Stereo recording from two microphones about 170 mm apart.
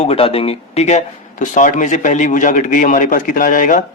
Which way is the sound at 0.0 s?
35° left (ahead or behind).